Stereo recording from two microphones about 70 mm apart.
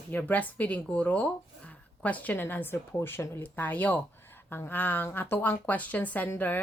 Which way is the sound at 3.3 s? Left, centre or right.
Left.